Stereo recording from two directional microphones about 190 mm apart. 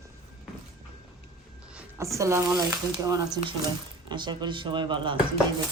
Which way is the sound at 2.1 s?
15° right (ahead or behind).